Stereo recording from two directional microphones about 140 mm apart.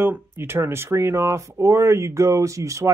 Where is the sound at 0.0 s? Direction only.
15° right (ahead or behind).